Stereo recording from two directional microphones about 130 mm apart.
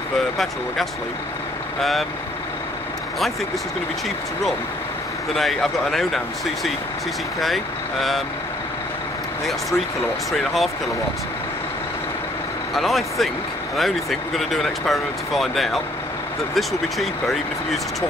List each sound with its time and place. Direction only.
1.8 s speech: centre (ahead or behind)
5.3 s speech: centre (ahead or behind)
9.5 s speech: centre (ahead or behind)
12.7 s speech: centre (ahead or behind)